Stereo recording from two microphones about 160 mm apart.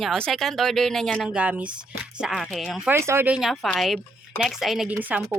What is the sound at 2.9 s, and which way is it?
Speech, 15° right (ahead or behind).